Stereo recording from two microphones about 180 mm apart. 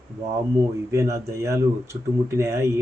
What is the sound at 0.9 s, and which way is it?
Speech, 15° right (ahead or behind).